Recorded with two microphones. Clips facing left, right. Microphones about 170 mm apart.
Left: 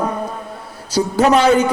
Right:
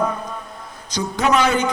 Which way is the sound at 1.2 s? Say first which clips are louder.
Left 5 dB; 30° left (ahead or behind).